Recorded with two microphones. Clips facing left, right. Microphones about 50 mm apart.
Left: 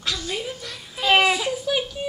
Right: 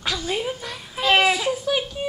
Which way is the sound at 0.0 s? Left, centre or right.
Centre.